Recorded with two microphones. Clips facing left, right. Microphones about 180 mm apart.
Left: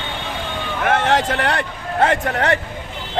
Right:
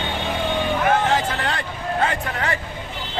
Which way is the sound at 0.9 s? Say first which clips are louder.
Left 3 dB; 80° left.